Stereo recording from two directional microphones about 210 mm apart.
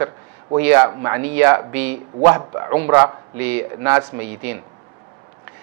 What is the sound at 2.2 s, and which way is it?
A man's voice, 25° right (ahead or behind).